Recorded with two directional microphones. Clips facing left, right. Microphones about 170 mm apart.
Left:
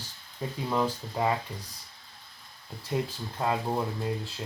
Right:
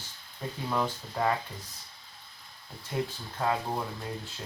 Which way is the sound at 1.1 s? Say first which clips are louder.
Even; 15° left (ahead or behind).